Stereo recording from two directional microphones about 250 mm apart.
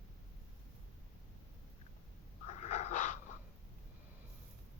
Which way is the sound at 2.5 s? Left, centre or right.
Left.